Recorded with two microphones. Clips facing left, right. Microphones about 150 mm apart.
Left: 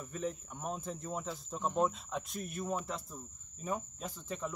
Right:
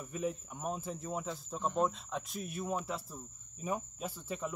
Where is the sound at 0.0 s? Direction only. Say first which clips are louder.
Right 2 dB; 10° right (ahead or behind).